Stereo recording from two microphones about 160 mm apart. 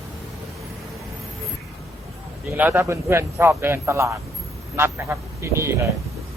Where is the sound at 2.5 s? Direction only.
10° right (ahead or behind).